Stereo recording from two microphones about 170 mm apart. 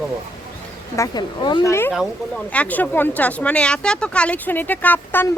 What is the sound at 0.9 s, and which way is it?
Speech, 20° left (ahead or behind).